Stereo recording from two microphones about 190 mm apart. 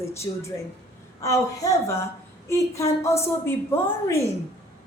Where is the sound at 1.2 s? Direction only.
15° left (ahead or behind).